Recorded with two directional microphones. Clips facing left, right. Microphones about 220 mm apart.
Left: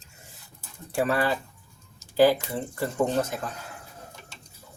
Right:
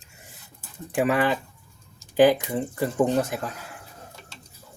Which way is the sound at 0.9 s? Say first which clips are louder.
Right 3 dB; 15° right (ahead or behind).